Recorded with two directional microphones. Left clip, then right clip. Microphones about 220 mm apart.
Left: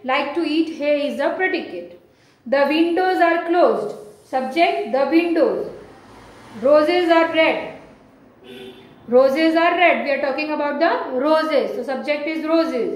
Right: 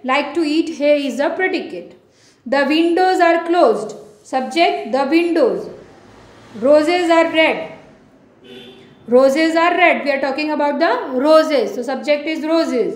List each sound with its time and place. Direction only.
0.0 s a woman's voice: 50° right (ahead or behind)
6.6 s a woman's voice: 50° right (ahead or behind)
9.1 s a woman's voice: 50° right (ahead or behind)